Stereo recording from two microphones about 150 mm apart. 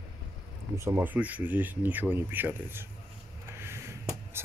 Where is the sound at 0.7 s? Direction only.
20° right (ahead or behind).